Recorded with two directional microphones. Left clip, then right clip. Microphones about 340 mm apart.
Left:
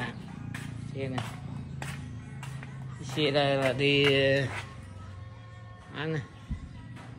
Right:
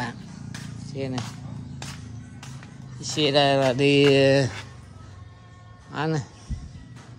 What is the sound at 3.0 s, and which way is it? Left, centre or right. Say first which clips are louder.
Speech: right 6 dB; centre.